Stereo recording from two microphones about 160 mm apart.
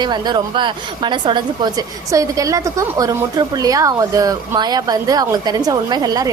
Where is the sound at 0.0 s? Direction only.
25° right (ahead or behind).